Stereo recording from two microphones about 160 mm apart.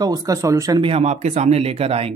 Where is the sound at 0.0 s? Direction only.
20° right (ahead or behind).